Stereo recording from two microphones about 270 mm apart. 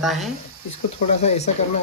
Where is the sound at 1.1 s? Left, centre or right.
Left.